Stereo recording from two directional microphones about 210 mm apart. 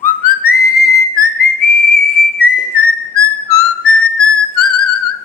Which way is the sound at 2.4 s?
45° left (ahead or behind).